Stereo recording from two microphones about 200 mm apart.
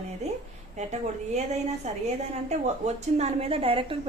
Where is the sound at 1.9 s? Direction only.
35° right (ahead or behind).